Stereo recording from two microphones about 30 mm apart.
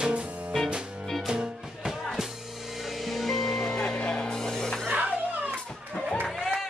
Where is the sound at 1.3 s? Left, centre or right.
Right.